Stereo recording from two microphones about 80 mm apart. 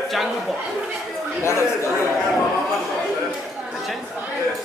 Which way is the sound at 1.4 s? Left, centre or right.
Left.